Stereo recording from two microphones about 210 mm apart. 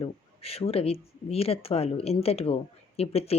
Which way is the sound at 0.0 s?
30° left (ahead or behind).